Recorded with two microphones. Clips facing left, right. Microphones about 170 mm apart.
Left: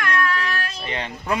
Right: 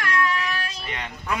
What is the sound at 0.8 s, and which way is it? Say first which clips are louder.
Speech: left 4 dB; 30° left (ahead or behind).